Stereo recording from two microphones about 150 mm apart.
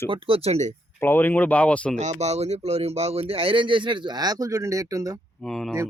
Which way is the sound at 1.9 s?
50° right (ahead or behind).